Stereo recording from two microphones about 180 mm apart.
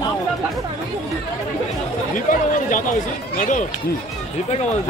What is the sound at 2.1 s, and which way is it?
Speech, 45° left (ahead or behind).